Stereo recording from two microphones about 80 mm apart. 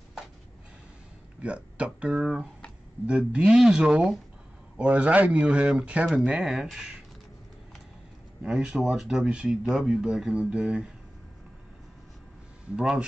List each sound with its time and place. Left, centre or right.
1.4 s speech: centre
8.5 s speech: centre